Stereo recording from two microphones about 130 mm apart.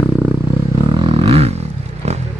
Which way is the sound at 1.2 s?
50° right (ahead or behind).